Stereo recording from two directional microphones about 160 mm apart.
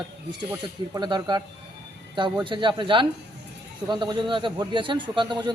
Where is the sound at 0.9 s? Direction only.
25° right (ahead or behind).